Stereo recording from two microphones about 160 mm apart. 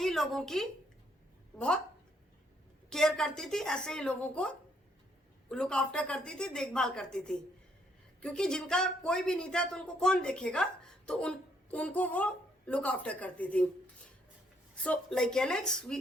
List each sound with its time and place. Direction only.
0.0 s a woman's voice: centre (ahead or behind)
2.9 s a woman's voice: 5° left (ahead or behind)
14.8 s a woman's voice: 5° left (ahead or behind)